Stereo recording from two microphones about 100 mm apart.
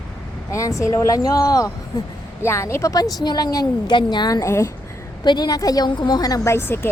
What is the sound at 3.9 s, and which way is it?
Speech, 50° left (ahead or behind).